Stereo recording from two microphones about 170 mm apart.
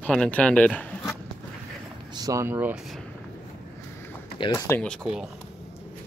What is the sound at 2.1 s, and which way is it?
Speech, 20° right (ahead or behind).